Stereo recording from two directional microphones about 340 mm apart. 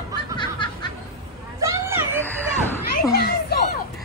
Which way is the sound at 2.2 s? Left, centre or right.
Centre.